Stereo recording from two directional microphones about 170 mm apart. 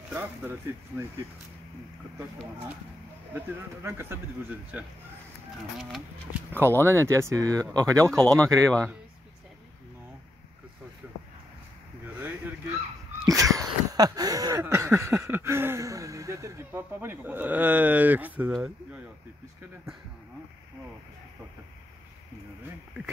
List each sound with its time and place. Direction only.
0.1 s speech: 10° right (ahead or behind)
3.3 s speech: 10° right (ahead or behind)
5.8 s speech: centre (ahead or behind)
6.5 s speech: 15° right (ahead or behind)
8.0 s speech: 5° left (ahead or behind)
12.2 s a sound: 10° right (ahead or behind)